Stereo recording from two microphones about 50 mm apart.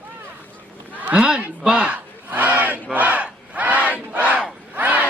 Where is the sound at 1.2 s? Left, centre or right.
Centre.